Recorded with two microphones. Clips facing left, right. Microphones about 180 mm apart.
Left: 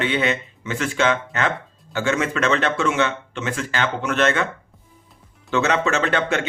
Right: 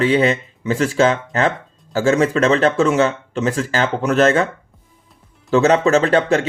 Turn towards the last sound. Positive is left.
turn(degrees=-35)  # may be behind; listen again after turning